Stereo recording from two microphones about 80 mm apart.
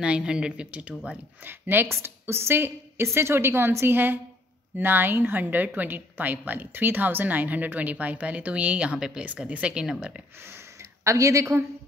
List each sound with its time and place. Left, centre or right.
0.0 s a woman's voice: centre
10.4 s speech: right